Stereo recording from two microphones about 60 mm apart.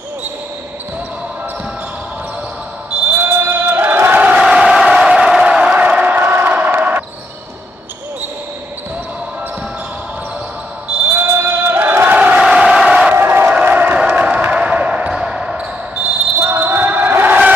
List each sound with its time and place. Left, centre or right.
3.2 s a sound: right
4.1 s crowd: right
4.4 s crowd: centre; by 7.1 s right
11.1 s a sound: right
12.1 s crowd: right
12.4 s crowd: centre
13.1 s crowd: right
13.5 s crowd: right
14.5 s basketball bounce: right
16.3 s basketball bounce: right